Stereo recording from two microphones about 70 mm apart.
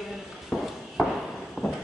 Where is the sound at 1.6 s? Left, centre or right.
Centre.